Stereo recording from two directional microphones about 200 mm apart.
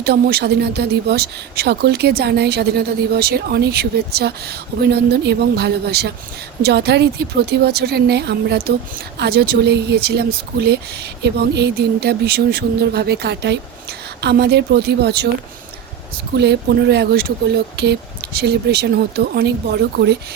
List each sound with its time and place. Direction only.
0.0 s speech: 50° right (ahead or behind)
16.4 s speech: 55° right (ahead or behind)